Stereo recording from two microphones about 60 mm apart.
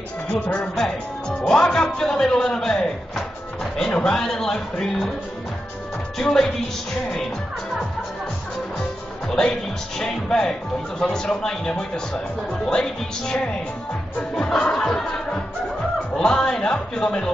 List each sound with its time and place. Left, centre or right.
0.3 s speech: centre
1.4 s music: centre
4.0 s speech: centre
6.1 s speech: centre
9.3 s speech: centre